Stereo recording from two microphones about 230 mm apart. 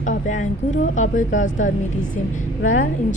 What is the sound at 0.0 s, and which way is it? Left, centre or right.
A woman's voice, left.